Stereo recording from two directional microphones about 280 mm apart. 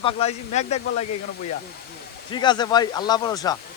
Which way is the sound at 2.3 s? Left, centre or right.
Centre.